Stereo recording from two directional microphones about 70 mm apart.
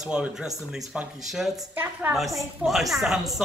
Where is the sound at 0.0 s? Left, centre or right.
Centre.